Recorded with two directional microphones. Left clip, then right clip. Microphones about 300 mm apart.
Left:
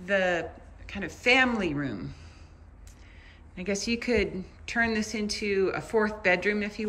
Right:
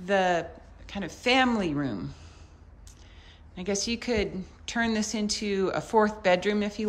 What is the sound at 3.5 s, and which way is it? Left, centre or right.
A woman's voice, centre.